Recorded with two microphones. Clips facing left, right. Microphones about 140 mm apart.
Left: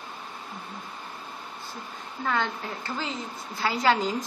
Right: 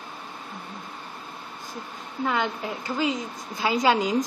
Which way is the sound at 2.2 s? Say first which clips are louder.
Right 2 dB; 15° right (ahead or behind).